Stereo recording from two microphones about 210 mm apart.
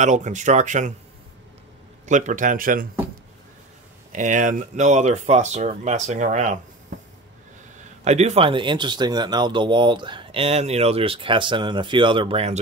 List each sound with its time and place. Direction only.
0.0 s speech: 35° right (ahead or behind)
2.0 s speech: 35° right (ahead or behind)
4.1 s speech: 35° right (ahead or behind)
8.0 s speech: 30° right (ahead or behind)